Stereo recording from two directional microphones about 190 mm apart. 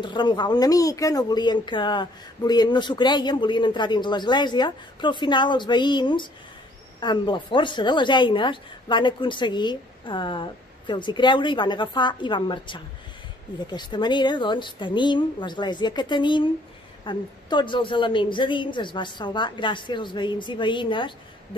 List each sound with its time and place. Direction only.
0.0 s speech: 25° left (ahead or behind)